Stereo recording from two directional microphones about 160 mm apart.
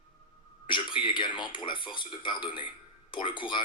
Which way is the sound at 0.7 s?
30° left (ahead or behind).